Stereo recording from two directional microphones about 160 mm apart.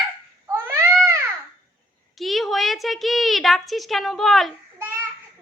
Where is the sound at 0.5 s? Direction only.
15° right (ahead or behind).